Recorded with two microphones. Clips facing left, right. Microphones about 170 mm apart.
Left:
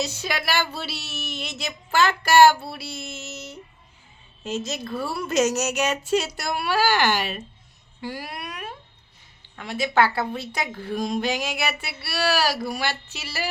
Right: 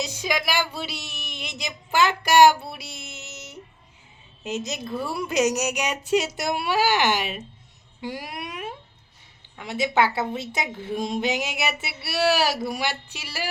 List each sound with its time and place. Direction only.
0.0 s a woman's voice: 15° right (ahead or behind)